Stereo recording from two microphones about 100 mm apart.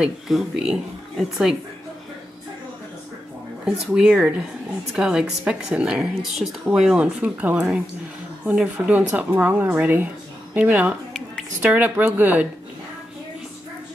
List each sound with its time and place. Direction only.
0.0 s speech: 5° right (ahead or behind)
3.9 s speech: 5° right (ahead or behind)
8.7 s speech: 15° right (ahead or behind)